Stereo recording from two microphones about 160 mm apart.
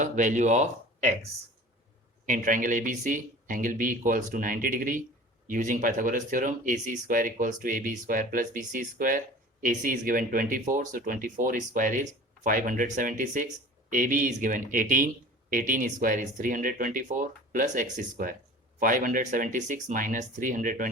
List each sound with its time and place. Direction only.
0.0 s speech: 50° right (ahead or behind)